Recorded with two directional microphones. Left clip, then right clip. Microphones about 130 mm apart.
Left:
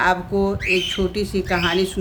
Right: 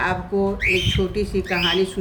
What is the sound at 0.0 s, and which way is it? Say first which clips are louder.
Speech: left 3 dB; 70° left (ahead or behind).